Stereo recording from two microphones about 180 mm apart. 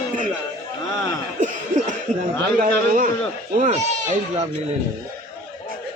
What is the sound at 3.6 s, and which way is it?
Speech, 40° right (ahead or behind).